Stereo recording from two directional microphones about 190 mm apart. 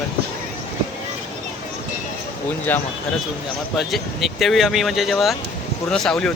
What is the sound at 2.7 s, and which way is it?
A man's voice, 10° left (ahead or behind).